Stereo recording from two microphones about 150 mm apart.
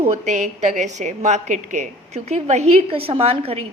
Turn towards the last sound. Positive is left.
turn(degrees=-40)  # may be behind; listen again after turning